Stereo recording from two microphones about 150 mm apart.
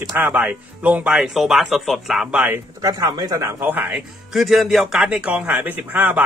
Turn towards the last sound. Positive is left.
turn(degrees=-10)  # may be behind; listen again after turning